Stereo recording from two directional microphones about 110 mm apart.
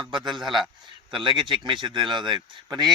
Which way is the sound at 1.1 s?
45° right (ahead or behind).